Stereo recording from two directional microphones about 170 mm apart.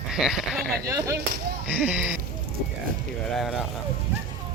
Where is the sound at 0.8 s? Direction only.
20° right (ahead or behind).